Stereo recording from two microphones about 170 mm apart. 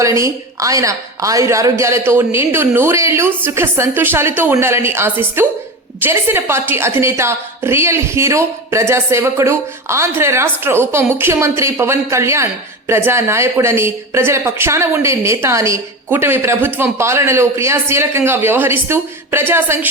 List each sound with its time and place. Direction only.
0.0 s a woman's voice: 20° right (ahead or behind)